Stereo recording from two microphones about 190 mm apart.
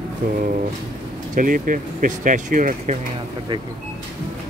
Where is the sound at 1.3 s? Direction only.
45° right (ahead or behind).